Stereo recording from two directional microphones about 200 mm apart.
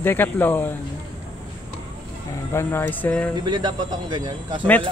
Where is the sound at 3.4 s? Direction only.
20° right (ahead or behind).